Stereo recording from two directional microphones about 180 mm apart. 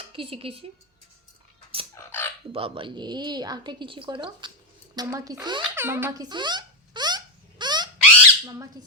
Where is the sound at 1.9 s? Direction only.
10° left (ahead or behind).